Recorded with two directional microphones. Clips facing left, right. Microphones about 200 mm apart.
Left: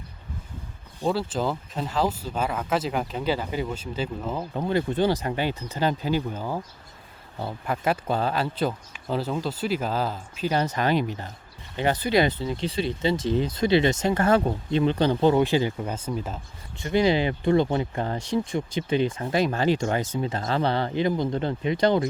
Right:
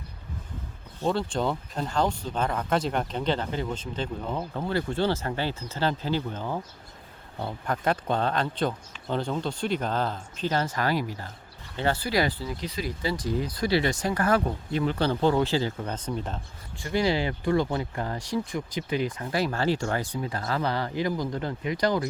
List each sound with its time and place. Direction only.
1.0 s speech: 5° left (ahead or behind)
4.5 s speech: 20° left (ahead or behind)
16.7 s speech: 20° left (ahead or behind)